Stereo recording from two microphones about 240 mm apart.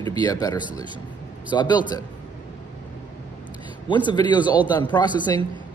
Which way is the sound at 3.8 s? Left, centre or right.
Centre.